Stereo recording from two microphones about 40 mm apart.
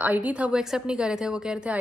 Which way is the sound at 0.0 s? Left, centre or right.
Right.